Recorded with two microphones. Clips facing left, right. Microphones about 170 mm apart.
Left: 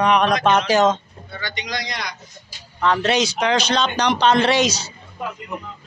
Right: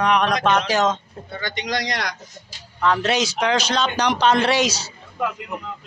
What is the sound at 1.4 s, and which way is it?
Speech, 55° right (ahead or behind).